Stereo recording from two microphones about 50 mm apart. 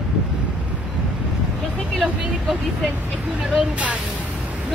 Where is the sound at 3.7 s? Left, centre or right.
Right.